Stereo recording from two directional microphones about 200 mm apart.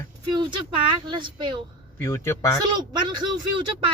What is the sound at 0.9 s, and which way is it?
Speech, 25° right (ahead or behind).